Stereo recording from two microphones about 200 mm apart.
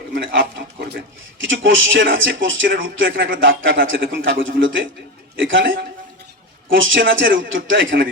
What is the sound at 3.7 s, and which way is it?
Speech, 50° right (ahead or behind).